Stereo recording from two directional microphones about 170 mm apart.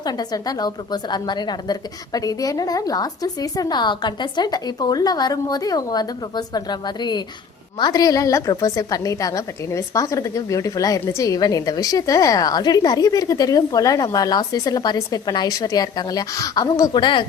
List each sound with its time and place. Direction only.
0.0 s a woman's voice: 25° left (ahead or behind)